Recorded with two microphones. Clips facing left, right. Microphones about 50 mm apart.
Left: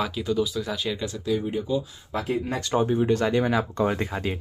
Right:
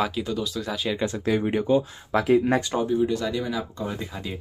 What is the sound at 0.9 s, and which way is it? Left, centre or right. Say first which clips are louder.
Speech: right 4 dB; right.